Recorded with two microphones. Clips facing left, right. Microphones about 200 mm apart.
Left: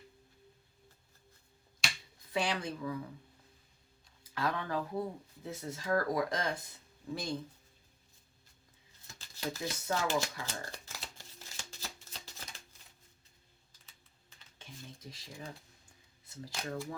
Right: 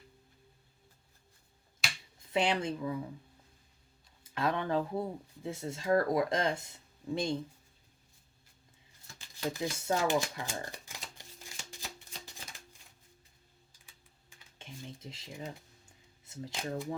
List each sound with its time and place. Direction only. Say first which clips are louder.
1.8 s finger snapping: even; centre (ahead or behind)
2.3 s speech: right 4 dB; 25° right (ahead or behind)
4.2 s speech: right 3 dB; 25° right (ahead or behind)
9.5 s speech: right 3 dB; 20° right (ahead or behind)
11.8 s a sound: right 1 dB; 15° right (ahead or behind)
13.8 s typing: right 2 dB; 15° right (ahead or behind)
15.0 s speech: right 3 dB; 25° right (ahead or behind)